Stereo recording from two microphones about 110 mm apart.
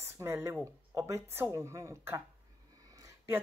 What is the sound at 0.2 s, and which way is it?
A woman's voice, 25° right (ahead or behind).